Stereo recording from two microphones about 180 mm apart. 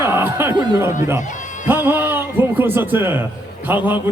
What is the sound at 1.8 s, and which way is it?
A man's voice, 10° right (ahead or behind).